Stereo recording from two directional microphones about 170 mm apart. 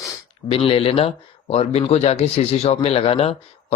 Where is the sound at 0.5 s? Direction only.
35° left (ahead or behind).